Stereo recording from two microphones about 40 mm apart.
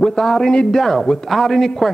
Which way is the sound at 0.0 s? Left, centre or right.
Centre.